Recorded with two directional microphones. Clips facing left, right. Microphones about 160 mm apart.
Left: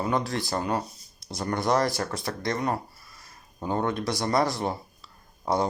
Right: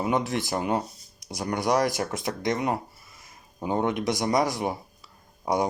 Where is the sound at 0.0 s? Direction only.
15° right (ahead or behind).